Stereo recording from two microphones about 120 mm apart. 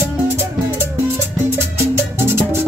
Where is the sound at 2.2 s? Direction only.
20° right (ahead or behind).